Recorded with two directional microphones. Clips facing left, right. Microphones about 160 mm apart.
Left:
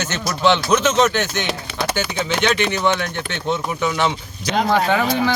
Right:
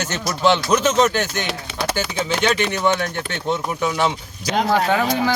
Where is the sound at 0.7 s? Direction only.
40° right (ahead or behind).